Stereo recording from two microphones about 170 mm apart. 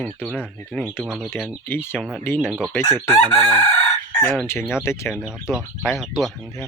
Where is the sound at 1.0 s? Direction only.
5° right (ahead or behind).